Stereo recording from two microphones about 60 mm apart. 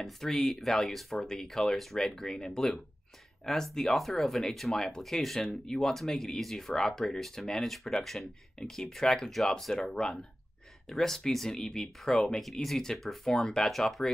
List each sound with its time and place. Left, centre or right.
0.0 s speech: centre